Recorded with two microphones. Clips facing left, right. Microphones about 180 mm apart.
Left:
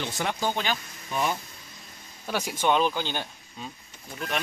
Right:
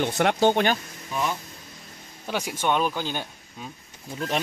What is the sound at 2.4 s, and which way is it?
Speech, 5° right (ahead or behind).